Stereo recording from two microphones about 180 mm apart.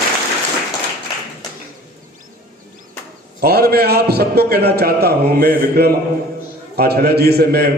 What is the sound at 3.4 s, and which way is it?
A man's voice, 60° right (ahead or behind).